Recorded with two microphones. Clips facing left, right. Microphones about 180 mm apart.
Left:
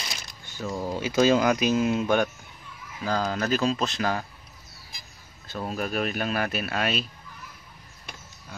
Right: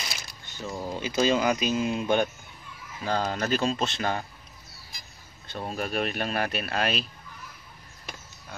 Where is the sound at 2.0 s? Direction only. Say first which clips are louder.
Left 1 dB; 20° right (ahead or behind).